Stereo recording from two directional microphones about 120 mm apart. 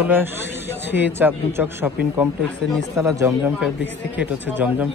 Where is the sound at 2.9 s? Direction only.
25° right (ahead or behind).